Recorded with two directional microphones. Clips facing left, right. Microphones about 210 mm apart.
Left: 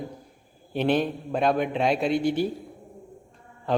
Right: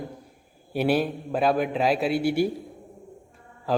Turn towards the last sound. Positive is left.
turn(degrees=-5)  # may be behind; listen again after turning